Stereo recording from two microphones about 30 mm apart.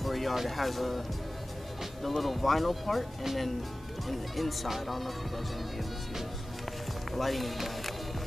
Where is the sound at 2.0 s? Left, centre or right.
Centre.